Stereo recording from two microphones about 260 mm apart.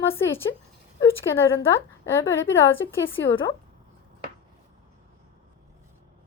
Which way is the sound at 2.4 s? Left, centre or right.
Centre.